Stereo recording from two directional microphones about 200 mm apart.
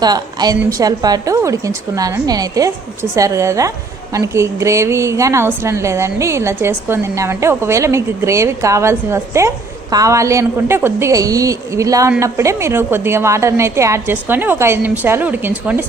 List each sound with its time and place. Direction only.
0.0 s a woman's voice: 20° right (ahead or behind)